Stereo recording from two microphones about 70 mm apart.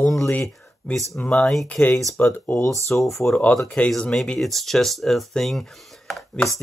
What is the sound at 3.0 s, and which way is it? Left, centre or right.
Speech, centre.